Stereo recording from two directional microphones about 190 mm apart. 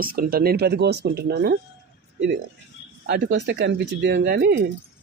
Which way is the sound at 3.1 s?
65° right (ahead or behind).